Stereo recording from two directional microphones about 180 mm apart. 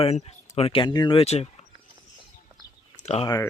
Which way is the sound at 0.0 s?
35° left (ahead or behind).